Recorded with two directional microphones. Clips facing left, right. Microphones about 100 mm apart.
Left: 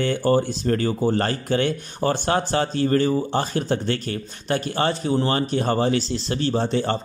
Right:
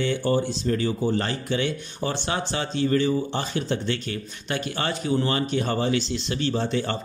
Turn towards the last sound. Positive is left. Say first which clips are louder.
# left 3 dB
turn(degrees=35)  # may be behind; listen again after turning